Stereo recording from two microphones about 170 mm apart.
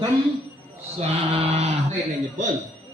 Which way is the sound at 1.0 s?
40° right (ahead or behind).